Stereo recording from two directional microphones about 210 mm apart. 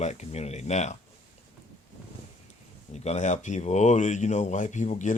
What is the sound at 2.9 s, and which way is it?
Speech, 30° left (ahead or behind).